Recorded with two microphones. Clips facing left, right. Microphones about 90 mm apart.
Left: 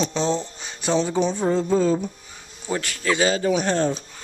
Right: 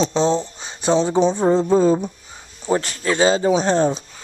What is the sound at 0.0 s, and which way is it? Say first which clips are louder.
Speech: right 5 dB; 30° right (ahead or behind).